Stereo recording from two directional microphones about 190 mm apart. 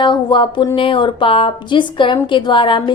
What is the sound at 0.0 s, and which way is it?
A woman's voice, 25° left (ahead or behind).